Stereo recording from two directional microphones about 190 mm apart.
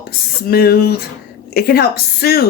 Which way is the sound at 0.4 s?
55° left (ahead or behind).